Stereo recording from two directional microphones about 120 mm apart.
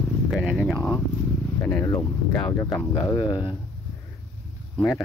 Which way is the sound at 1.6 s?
25° left (ahead or behind).